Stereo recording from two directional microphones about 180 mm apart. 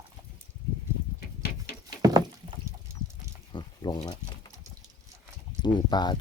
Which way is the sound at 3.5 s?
25° left (ahead or behind).